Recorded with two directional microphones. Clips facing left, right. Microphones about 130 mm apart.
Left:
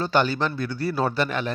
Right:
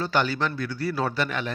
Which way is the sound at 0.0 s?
30° left (ahead or behind).